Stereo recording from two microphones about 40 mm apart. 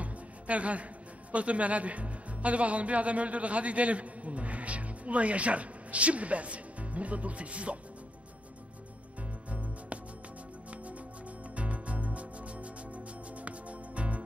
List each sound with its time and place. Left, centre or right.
0.0 s music: right
1.3 s speech: right
9.5 s music: right
11.5 s music: right